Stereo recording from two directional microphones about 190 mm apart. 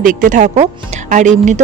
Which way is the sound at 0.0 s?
45° right (ahead or behind).